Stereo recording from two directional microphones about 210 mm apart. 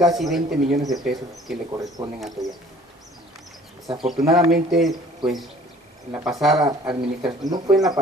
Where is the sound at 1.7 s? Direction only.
15° right (ahead or behind).